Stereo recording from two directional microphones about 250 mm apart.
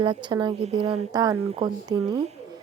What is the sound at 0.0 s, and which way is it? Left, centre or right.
A woman's voice, centre.